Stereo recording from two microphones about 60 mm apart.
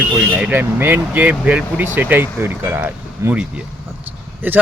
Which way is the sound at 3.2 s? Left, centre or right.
Right.